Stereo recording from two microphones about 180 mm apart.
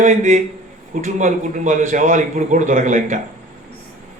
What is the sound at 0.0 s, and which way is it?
A man's voice, 40° right (ahead or behind).